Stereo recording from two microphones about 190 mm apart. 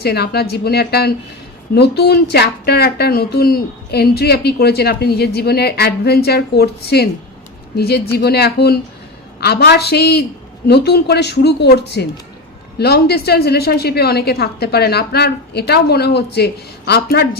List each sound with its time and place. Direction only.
0.0 s speech: 55° left (ahead or behind)